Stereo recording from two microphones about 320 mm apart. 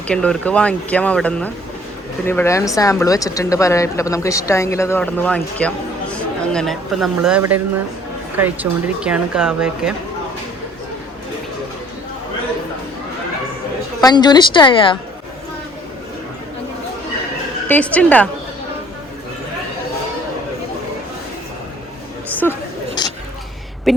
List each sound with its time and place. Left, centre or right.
0.1 s speech: centre
14.0 s speech: centre
17.7 s speech: centre
23.0 s a sound: centre